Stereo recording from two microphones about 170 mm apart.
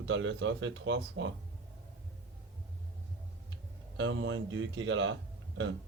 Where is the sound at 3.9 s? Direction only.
90° right.